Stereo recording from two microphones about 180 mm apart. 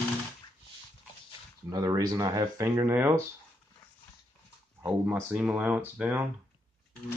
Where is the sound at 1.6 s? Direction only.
20° right (ahead or behind).